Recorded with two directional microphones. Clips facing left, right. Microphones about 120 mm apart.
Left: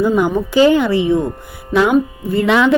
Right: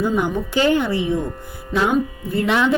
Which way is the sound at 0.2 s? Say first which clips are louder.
Left 7 dB; 90° left.